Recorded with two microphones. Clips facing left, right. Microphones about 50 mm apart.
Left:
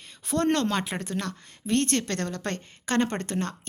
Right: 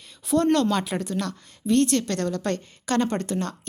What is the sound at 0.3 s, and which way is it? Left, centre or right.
A woman's voice, left.